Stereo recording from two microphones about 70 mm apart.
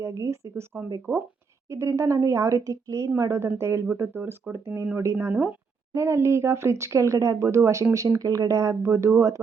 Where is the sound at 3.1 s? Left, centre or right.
Right.